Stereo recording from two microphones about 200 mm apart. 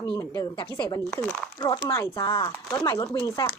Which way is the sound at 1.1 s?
5° left (ahead or behind).